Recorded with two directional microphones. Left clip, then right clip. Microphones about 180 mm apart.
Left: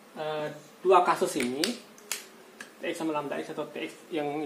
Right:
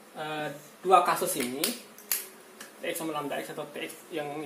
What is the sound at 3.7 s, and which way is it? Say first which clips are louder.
Speech: left 1 dB; 40° left (ahead or behind).